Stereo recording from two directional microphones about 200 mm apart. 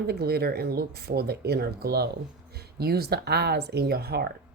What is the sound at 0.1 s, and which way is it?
Speech, 50° right (ahead or behind).